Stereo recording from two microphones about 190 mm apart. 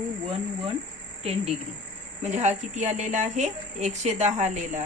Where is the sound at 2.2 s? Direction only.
35° right (ahead or behind).